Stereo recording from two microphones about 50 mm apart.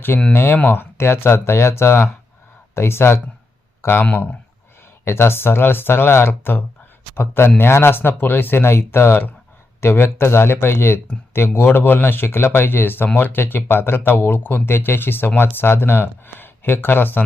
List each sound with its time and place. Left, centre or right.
0.1 s speech: left
5.0 s speech: left